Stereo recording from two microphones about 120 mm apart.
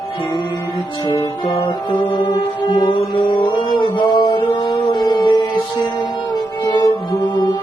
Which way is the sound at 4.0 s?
45° left (ahead or behind).